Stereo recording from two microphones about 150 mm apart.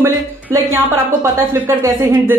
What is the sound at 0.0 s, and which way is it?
Speech, 15° right (ahead or behind).